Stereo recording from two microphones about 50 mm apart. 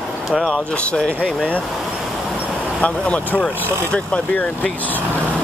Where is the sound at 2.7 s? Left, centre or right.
Left.